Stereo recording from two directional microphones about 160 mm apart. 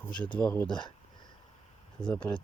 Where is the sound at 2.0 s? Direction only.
30° left (ahead or behind).